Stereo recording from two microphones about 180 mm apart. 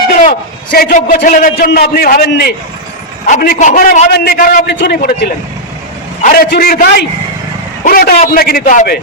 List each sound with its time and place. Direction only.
0.1 s a man's voice: 50° left (ahead or behind)
3.2 s a man's voice: 45° left (ahead or behind)
4.7 s a man's voice: 75° left (ahead or behind)
6.2 s a man's voice: 55° left (ahead or behind)